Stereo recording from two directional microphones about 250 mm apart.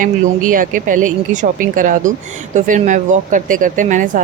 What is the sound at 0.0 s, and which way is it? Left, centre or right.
Speech, right.